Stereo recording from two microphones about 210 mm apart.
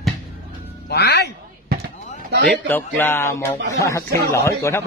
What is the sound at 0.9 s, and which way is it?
Music, 55° left (ahead or behind).